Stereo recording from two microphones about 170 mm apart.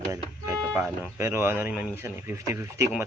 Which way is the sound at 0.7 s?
15° right (ahead or behind).